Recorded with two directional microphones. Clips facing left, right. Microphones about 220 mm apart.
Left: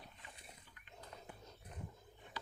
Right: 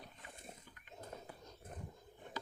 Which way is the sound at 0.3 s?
50° right (ahead or behind).